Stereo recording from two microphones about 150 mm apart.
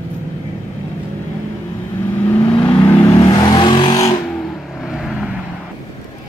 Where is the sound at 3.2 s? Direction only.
25° left (ahead or behind).